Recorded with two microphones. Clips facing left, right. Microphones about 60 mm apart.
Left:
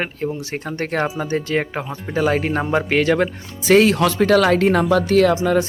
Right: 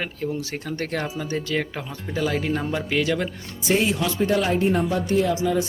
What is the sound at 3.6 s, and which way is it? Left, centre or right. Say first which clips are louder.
Speech: left 8 dB; left.